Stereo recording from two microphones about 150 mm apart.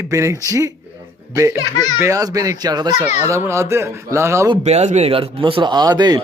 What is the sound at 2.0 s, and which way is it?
Speech, 20° right (ahead or behind).